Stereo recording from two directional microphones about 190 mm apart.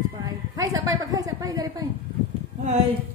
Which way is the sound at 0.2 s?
20° right (ahead or behind).